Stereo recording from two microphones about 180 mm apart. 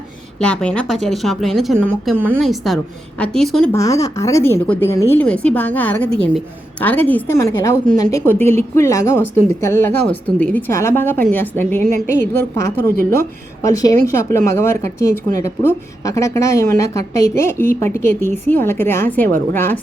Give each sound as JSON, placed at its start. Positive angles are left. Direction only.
{"t": 0.3, "sound": "speech", "side_deg": 5}
{"t": 3.7, "sound": "a woman's voice", "side_deg": 15}